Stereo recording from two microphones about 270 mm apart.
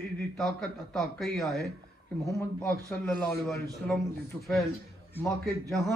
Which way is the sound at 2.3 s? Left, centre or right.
Centre.